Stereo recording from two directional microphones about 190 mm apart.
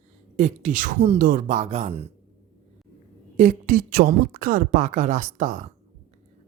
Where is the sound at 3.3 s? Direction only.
40° right (ahead or behind).